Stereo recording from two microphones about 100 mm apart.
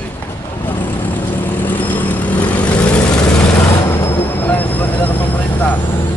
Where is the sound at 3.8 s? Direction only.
25° left (ahead or behind).